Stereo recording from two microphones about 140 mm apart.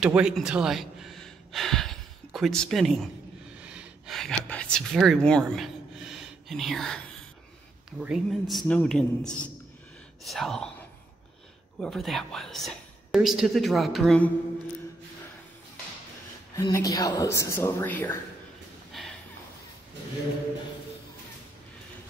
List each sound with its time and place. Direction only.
0.0 s speech: 5° right (ahead or behind)
3.5 s a sound: 10° right (ahead or behind)
4.2 s a woman's voice: 5° left (ahead or behind)
8.0 s a woman's voice: 5° right (ahead or behind)
11.8 s a woman's voice: centre (ahead or behind)
16.5 s speech: 25° left (ahead or behind)
18.9 s a sound: centre (ahead or behind)